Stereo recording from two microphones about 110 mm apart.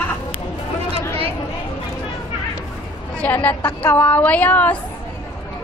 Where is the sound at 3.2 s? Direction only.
15° left (ahead or behind).